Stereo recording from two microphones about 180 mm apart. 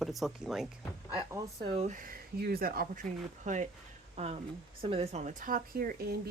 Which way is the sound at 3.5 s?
40° right (ahead or behind).